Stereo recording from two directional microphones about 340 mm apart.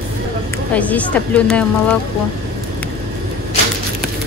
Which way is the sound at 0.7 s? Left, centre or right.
Centre.